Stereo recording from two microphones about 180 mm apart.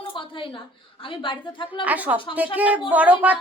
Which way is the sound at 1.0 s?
30° left (ahead or behind).